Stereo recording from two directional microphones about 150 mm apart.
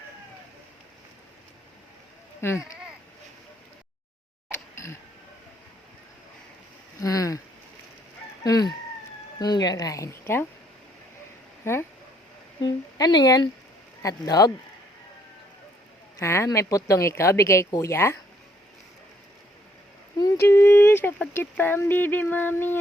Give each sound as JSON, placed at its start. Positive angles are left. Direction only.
{"t": 2.4, "sound": "speech", "side_deg": 15}
{"t": 4.7, "sound": "a sound", "side_deg": 20}
{"t": 7.0, "sound": "a sound", "side_deg": 20}
{"t": 8.4, "sound": "chicken", "side_deg": 25}
{"t": 9.4, "sound": "speech", "side_deg": 25}
{"t": 11.6, "sound": "speech", "side_deg": 15}
{"t": 12.6, "sound": "speech", "side_deg": 30}
{"t": 16.1, "sound": "speech", "side_deg": 20}
{"t": 20.1, "sound": "speech", "side_deg": 20}